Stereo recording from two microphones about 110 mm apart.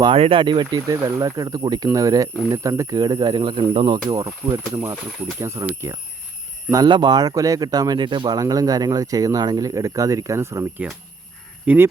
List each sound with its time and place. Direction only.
0.1 s speech: 55° right (ahead or behind)
4.1 s speech: 30° right (ahead or behind)
6.8 s speech: 45° right (ahead or behind)
8.4 s speech: 30° right (ahead or behind)
11.6 s speech: 15° right (ahead or behind)